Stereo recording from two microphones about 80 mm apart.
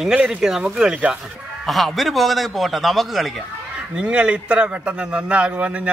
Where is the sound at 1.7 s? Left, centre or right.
Centre.